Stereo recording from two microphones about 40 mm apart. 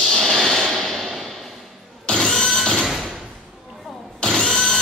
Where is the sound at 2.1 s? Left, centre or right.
Centre.